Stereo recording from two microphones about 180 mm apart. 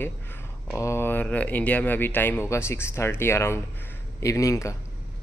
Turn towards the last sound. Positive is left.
turn(degrees=15)  # may be behind; listen again after turning